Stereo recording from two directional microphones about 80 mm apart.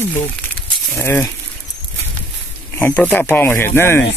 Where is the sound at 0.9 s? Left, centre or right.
Left.